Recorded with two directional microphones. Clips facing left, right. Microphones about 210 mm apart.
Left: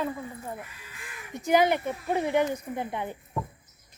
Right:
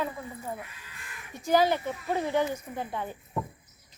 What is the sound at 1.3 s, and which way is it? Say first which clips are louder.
Speech: left 1 dB; 20° left (ahead or behind).